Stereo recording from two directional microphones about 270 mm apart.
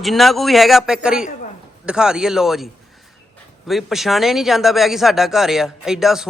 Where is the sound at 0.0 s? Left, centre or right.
Centre.